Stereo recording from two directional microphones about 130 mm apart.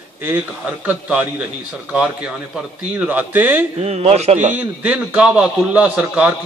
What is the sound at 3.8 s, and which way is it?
Speech, 55° right (ahead or behind).